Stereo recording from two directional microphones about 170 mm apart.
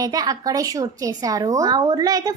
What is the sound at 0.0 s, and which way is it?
A woman's voice, 20° right (ahead or behind).